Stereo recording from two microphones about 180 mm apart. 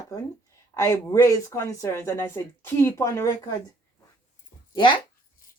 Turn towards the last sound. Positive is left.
turn(degrees=25)  # may be behind; listen again after turning